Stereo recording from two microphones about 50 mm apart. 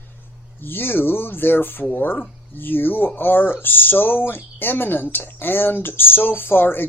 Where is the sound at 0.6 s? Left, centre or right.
Left.